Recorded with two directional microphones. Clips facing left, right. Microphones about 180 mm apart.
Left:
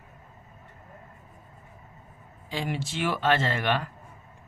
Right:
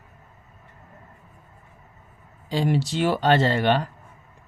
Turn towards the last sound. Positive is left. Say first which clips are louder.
# right 6 dB
turn(degrees=-35)  # may be behind; listen again after turning